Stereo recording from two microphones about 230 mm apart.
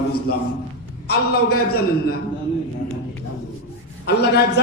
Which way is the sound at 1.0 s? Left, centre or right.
Left.